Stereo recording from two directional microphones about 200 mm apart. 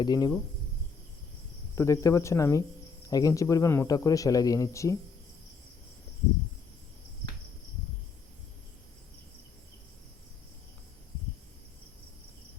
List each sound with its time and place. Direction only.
0.0 s speech: 20° left (ahead or behind)
1.7 s speech: 15° left (ahead or behind)